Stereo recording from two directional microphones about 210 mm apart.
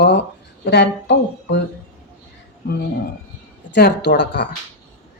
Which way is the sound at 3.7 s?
55° left (ahead or behind).